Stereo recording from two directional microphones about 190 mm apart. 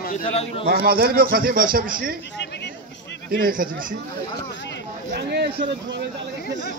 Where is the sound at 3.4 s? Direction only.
45° right (ahead or behind).